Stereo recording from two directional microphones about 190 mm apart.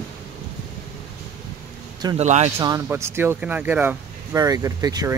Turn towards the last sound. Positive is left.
turn(degrees=-20)  # may be behind; listen again after turning